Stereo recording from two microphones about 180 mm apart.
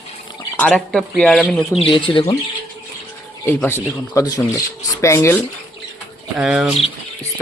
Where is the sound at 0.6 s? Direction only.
5° left (ahead or behind).